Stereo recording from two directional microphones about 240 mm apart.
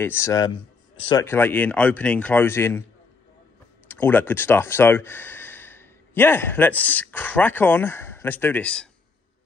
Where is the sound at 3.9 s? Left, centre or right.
Centre.